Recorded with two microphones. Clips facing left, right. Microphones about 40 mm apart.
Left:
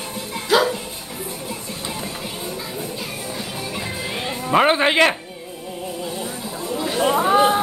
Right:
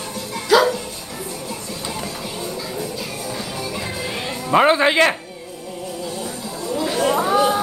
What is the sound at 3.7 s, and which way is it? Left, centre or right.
Music, centre.